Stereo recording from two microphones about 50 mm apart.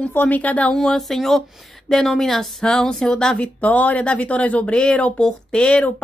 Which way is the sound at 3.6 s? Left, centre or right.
Left.